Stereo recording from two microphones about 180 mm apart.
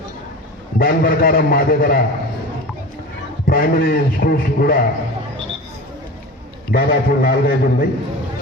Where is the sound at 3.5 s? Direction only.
55° left (ahead or behind).